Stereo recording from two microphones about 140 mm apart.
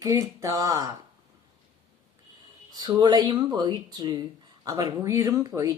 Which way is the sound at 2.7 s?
30° right (ahead or behind).